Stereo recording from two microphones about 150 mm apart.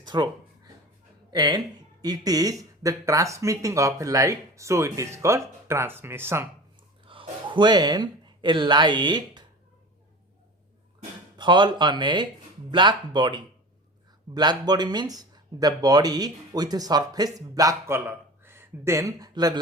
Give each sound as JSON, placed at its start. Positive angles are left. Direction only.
{"t": 0.0, "sound": "a sound", "side_deg": -30}
{"t": 1.3, "sound": "speech", "side_deg": -25}
{"t": 7.0, "sound": "speech", "side_deg": -35}
{"t": 11.3, "sound": "speech", "side_deg": -30}